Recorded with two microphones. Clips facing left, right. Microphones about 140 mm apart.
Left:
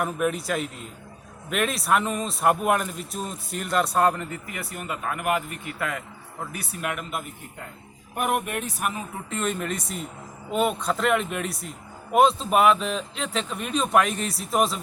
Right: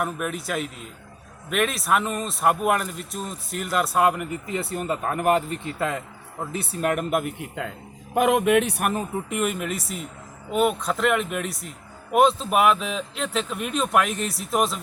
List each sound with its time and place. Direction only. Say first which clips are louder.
0.0 s speech: left 2 dB; centre (ahead or behind)
4.4 s speech: right 7 dB; 25° right (ahead or behind)
6.8 s speech: right 8 dB; 45° right (ahead or behind)
7.2 s a man's voice: right 8 dB; 75° right (ahead or behind)
9.3 s speech: even; 10° right (ahead or behind)